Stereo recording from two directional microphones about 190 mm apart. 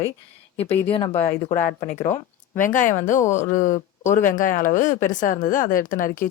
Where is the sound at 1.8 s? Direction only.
35° left (ahead or behind).